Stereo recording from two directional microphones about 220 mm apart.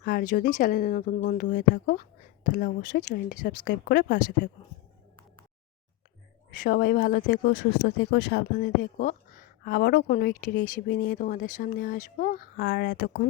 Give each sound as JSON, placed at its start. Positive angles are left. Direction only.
{"t": 0.0, "sound": "speech", "side_deg": 40}
{"t": 6.5, "sound": "speech", "side_deg": 40}